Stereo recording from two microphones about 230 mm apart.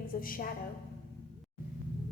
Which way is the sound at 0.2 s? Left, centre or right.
Left.